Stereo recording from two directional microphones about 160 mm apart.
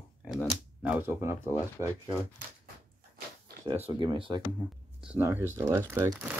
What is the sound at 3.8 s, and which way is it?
Speech, 30° right (ahead or behind).